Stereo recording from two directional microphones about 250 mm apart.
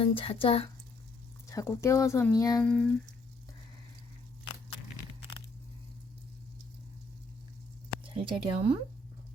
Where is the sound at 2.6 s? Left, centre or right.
Centre.